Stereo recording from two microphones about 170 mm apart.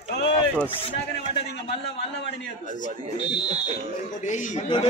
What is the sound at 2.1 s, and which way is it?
Speech, 90° left.